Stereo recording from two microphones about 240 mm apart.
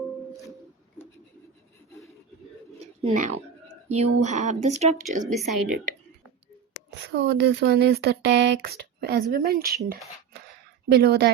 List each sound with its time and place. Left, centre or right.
2.7 s a sound: right
3.8 s speech: right
5.3 s speech: centre
7.1 s speech: right